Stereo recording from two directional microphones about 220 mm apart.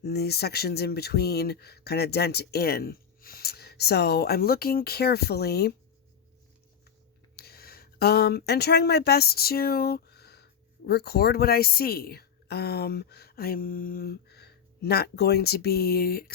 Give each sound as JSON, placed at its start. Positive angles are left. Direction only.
{"t": 0.0, "sound": "speech", "side_deg": 45}
{"t": 7.3, "sound": "speech", "side_deg": 45}